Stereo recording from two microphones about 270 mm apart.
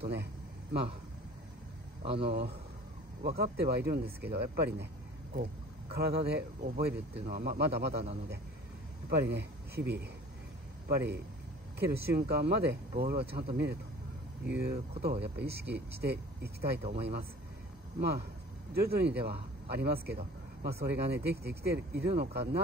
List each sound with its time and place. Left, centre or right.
0.0 s speech: right
2.0 s speech: right
18.7 s speech: right